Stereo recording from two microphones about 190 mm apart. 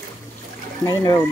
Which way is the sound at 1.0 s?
15° left (ahead or behind).